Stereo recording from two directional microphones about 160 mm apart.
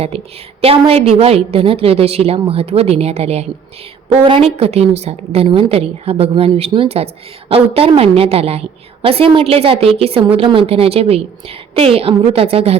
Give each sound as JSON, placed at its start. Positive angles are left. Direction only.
{"t": 0.0, "sound": "a woman's voice", "side_deg": -40}